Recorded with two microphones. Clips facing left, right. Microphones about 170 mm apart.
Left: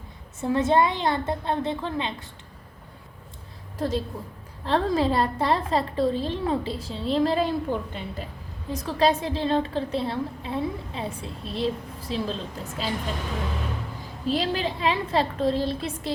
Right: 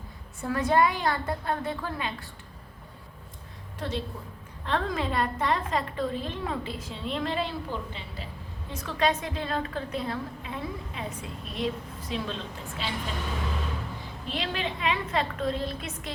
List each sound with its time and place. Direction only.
0.4 s a woman's voice: 25° left (ahead or behind)
3.8 s a woman's voice: 40° left (ahead or behind)
8.7 s a woman's voice: 35° left (ahead or behind)
14.3 s a woman's voice: 35° left (ahead or behind)